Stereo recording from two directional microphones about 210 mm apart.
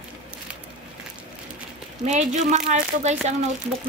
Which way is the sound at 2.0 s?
35° right (ahead or behind).